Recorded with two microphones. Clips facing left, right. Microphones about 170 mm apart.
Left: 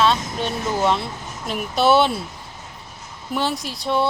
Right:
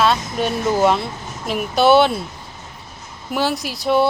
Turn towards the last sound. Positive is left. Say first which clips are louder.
# right 5 dB
turn(degrees=-5)  # may be behind; listen again after turning